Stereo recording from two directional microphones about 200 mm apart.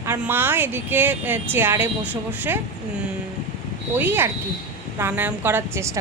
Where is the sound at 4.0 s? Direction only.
10° right (ahead or behind).